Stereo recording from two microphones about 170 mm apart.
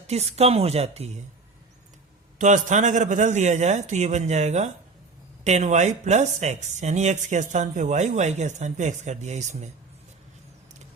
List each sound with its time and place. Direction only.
0.1 s speech: 40° right (ahead or behind)
2.4 s speech: 45° right (ahead or behind)